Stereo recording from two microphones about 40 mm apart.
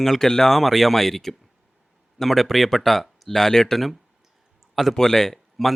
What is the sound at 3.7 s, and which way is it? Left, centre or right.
Speech, centre.